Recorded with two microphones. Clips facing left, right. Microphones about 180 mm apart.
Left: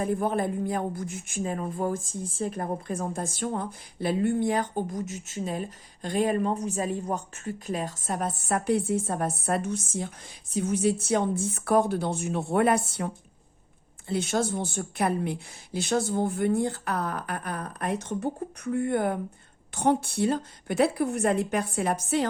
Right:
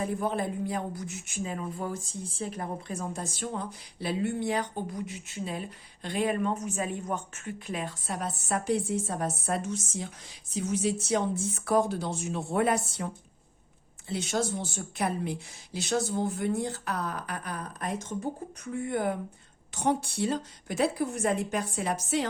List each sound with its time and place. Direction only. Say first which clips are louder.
0.0 s a woman's voice: left 3 dB; 50° left (ahead or behind)
14.1 s a woman's voice: left 3 dB; 55° left (ahead or behind)